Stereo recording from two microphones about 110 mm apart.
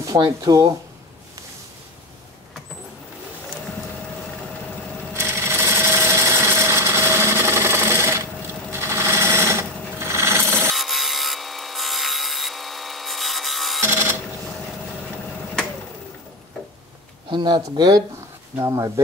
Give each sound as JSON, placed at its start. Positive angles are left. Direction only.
{"t": 0.2, "sound": "speech", "side_deg": -35}
{"t": 5.1, "sound": "jackhammer", "side_deg": -20}
{"t": 8.7, "sound": "sewing machine", "side_deg": -25}
{"t": 10.7, "sound": "wood", "side_deg": 0}
{"t": 13.7, "sound": "a sound", "side_deg": -20}
{"t": 17.3, "sound": "a sound", "side_deg": -45}
{"t": 18.6, "sound": "speech", "side_deg": -30}